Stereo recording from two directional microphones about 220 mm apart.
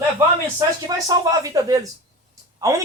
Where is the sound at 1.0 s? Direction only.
15° right (ahead or behind).